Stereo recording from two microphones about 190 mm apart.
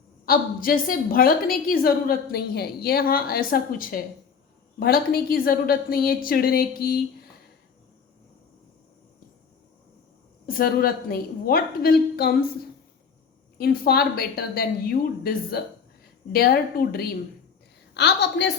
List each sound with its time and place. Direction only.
0.3 s a woman's voice: 50° left (ahead or behind)
10.4 s a woman's voice: 50° left (ahead or behind)
13.6 s a woman's voice: 55° left (ahead or behind)